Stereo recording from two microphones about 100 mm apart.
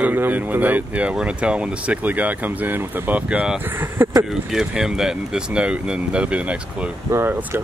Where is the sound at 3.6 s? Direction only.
20° right (ahead or behind).